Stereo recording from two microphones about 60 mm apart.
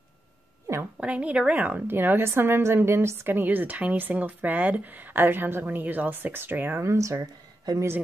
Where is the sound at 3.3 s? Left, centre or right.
Right.